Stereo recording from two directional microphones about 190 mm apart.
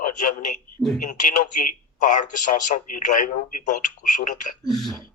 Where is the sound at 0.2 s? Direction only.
40° left (ahead or behind).